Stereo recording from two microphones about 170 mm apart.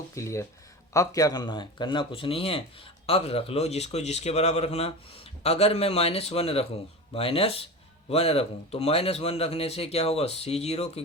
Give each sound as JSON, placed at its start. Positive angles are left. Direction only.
{"t": 0.1, "sound": "speech", "side_deg": 15}